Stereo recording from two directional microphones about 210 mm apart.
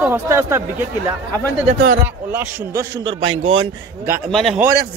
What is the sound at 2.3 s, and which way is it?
Speech, 10° right (ahead or behind).